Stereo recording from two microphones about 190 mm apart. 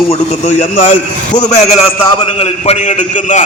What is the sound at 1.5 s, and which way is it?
A man's voice, 35° left (ahead or behind).